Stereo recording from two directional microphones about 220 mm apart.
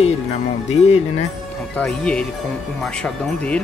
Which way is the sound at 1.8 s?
5° left (ahead or behind).